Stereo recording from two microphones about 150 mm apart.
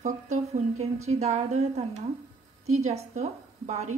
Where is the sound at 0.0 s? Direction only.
50° right (ahead or behind).